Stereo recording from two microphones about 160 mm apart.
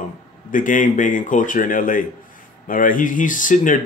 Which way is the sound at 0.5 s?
55° left (ahead or behind).